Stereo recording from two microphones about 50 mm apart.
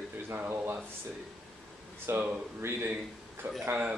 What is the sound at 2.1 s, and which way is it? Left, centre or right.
Speech, right.